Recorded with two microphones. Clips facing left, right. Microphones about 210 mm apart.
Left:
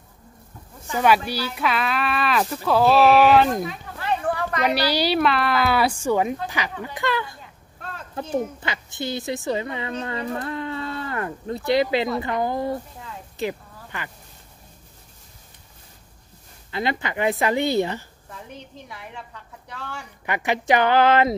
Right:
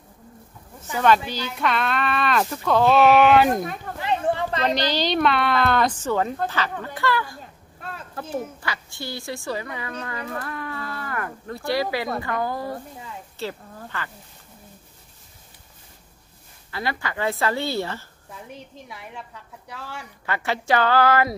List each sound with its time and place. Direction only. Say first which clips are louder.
0.9 s speech: even; 10° left (ahead or behind)
4.0 s a sound: right 1 dB; 25° right (ahead or behind)
4.6 s a woman's voice: left 2 dB; 10° left (ahead or behind)
8.5 s a woman's voice: left 3 dB; 20° left (ahead or behind)
16.7 s speech: left 3 dB; 20° left (ahead or behind)
18.9 s speech: even; centre (ahead or behind)
20.2 s speech: left 2 dB; 15° left (ahead or behind)